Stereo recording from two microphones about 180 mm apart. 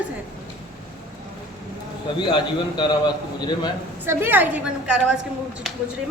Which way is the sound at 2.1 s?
25° left (ahead or behind).